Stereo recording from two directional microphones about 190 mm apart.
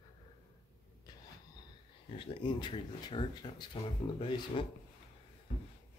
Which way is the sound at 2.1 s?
30° left (ahead or behind).